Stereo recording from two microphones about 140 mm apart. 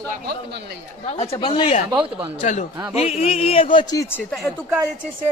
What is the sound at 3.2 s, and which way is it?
Speech, 45° left (ahead or behind).